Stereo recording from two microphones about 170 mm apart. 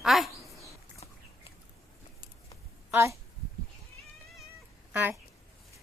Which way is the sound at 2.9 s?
15° right (ahead or behind).